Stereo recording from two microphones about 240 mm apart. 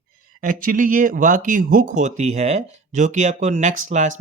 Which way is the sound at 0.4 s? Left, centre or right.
Right.